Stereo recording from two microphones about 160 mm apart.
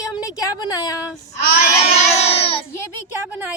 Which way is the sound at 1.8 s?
40° left (ahead or behind).